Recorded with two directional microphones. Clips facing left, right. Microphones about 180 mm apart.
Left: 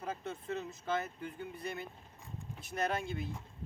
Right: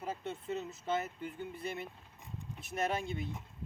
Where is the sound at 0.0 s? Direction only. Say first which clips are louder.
Right 1 dB; 5° right (ahead or behind).